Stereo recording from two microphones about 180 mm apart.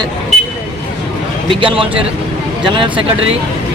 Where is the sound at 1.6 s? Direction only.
30° right (ahead or behind).